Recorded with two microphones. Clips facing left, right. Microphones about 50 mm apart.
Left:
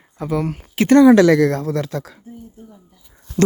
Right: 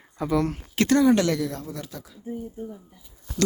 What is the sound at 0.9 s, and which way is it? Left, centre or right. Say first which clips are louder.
Speech: left 11 dB; left.